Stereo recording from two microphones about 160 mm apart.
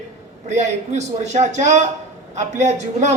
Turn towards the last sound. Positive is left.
turn(degrees=-45)  # may be behind; listen again after turning